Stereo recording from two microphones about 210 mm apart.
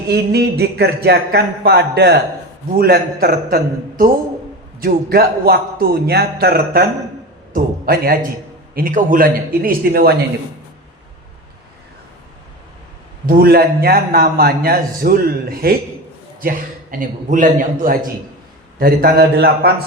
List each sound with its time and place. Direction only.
0.1 s a man's voice: 50° right (ahead or behind)
13.2 s a man's voice: 45° right (ahead or behind)